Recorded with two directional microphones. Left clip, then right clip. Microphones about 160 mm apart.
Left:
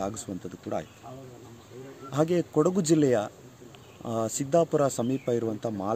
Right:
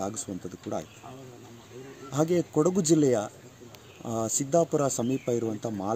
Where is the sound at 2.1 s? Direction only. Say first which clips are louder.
Even; 5° left (ahead or behind).